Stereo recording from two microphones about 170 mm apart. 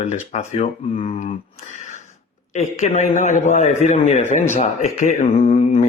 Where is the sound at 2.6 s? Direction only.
40° left (ahead or behind).